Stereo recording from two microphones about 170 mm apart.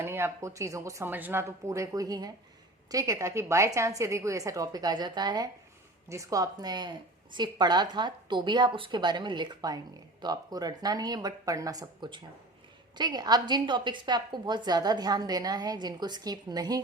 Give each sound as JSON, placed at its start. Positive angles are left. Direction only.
{"t": 0.0, "sound": "a woman's voice", "side_deg": -15}